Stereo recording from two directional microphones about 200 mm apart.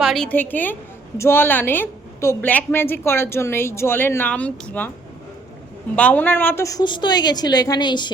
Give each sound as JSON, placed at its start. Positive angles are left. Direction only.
{"t": 0.0, "sound": "a woman's voice", "side_deg": 0}
{"t": 6.0, "sound": "a woman's voice", "side_deg": 10}